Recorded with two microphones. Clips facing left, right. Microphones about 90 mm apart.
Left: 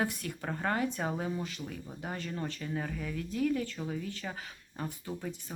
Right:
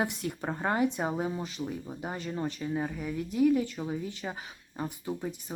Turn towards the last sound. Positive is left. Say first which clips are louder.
# right 4 dB
turn(degrees=-15)  # may be behind; listen again after turning